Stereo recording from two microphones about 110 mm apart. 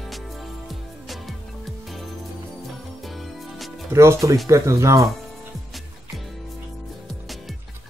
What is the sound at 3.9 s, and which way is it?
Speech, 25° right (ahead or behind).